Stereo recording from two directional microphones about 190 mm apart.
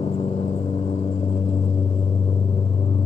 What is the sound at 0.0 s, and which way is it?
Gong, 30° left (ahead or behind).